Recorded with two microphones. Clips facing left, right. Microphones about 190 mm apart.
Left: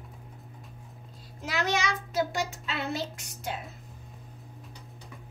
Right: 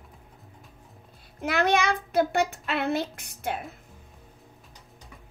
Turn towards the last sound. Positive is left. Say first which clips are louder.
# right 4 dB
turn(degrees=-60)  # may be behind; listen again after turning